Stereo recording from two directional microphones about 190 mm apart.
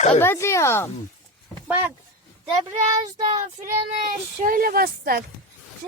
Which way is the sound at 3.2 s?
20° right (ahead or behind).